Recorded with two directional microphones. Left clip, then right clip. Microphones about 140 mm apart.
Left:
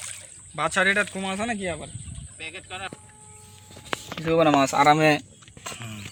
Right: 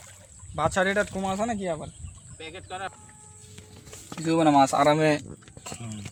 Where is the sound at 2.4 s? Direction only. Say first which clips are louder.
Left 1 dB; 40° right (ahead or behind).